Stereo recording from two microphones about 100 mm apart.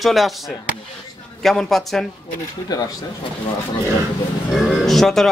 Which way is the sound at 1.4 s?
Centre (ahead or behind).